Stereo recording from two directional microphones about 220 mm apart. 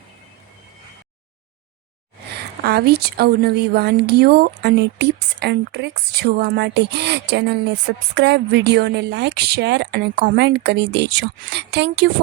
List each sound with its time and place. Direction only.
2.6 s a woman's voice: 45° right (ahead or behind)